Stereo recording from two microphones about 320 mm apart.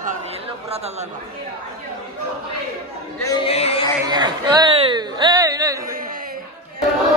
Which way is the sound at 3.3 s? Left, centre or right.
Centre.